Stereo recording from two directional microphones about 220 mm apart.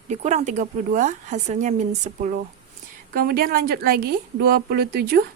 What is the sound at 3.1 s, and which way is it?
A woman's voice, 45° right (ahead or behind).